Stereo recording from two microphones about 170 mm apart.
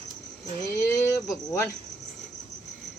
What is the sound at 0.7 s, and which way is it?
Speech, 15° left (ahead or behind).